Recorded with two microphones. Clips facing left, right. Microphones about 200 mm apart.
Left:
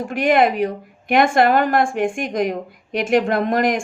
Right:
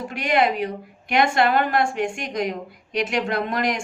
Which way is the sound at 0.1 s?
50° left (ahead or behind).